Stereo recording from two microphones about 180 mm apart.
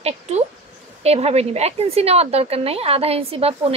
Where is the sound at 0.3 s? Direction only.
40° right (ahead or behind).